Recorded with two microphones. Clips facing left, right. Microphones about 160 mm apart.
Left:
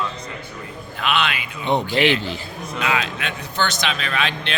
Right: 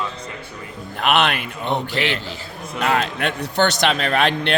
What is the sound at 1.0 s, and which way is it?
Speech, 60° right (ahead or behind).